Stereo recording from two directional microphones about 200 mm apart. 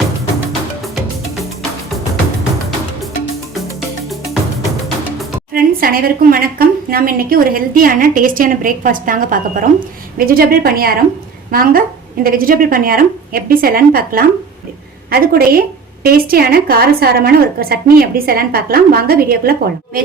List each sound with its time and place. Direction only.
5.5 s a woman's voice: 45° right (ahead or behind)